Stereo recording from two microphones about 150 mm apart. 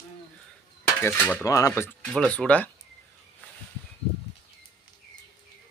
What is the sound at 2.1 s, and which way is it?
Speech, 5° left (ahead or behind).